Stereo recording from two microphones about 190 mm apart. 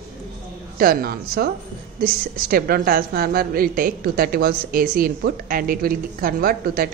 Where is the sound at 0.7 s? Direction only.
50° right (ahead or behind).